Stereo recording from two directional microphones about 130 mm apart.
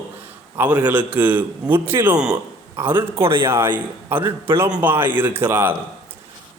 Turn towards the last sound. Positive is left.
turn(degrees=-15)  # may be behind; listen again after turning